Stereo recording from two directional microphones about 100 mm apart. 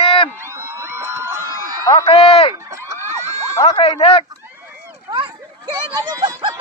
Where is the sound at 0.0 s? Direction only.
65° left (ahead or behind).